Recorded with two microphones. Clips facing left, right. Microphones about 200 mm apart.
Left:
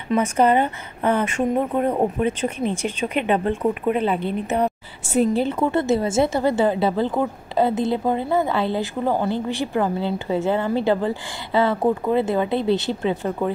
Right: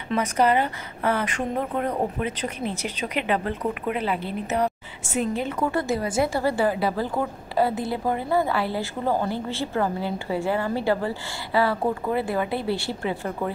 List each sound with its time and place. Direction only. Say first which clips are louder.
0.2 s a woman's voice: left 3 dB; 25° left (ahead or behind)